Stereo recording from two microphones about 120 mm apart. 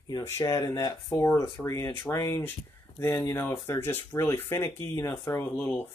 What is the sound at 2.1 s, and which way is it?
Speech, 20° left (ahead or behind).